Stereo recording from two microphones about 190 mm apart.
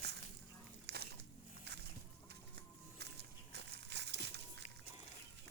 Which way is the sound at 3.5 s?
65° right (ahead or behind).